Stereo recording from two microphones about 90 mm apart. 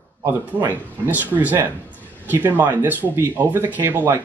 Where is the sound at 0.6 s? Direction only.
20° right (ahead or behind).